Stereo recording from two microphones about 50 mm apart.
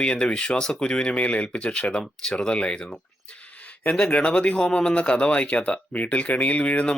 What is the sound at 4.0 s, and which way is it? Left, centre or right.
Speech, left.